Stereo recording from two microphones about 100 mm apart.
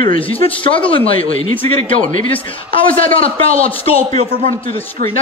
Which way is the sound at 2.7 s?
75° left (ahead or behind).